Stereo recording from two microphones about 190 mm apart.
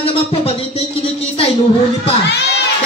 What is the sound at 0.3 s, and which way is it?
Speech, 30° left (ahead or behind).